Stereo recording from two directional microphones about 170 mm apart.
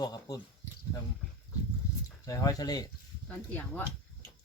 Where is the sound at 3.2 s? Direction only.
10° left (ahead or behind).